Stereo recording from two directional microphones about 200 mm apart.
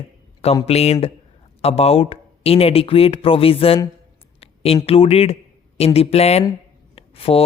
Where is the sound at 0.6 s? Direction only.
30° left (ahead or behind).